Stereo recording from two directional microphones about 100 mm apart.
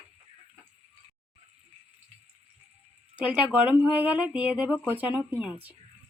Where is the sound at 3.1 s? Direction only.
15° right (ahead or behind).